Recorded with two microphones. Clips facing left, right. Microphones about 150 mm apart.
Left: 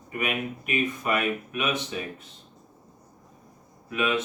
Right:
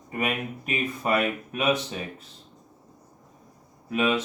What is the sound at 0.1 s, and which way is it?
Speech, 30° right (ahead or behind).